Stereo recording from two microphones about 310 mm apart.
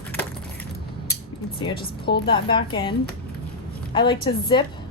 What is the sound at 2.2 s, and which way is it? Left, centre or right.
Speech, centre.